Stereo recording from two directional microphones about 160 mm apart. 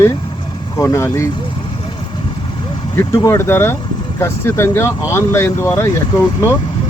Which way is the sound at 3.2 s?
15° left (ahead or behind).